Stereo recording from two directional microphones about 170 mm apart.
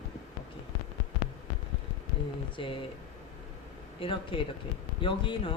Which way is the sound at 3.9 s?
30° left (ahead or behind).